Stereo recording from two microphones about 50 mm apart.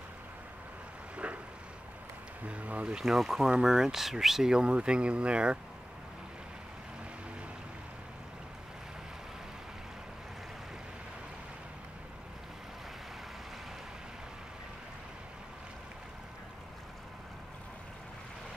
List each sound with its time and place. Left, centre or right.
1.1 s a sound: right
2.4 s speech: right
3.0 s speech: centre; by 5.6 s right